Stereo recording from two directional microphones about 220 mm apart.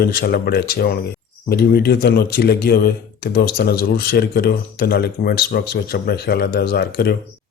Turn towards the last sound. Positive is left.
turn(degrees=45)  # may be behind; listen again after turning